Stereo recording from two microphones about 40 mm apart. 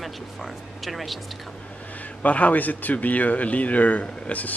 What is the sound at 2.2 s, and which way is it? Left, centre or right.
Speech, left.